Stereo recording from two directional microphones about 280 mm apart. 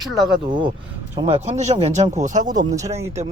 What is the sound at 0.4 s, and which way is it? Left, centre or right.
Speech, centre.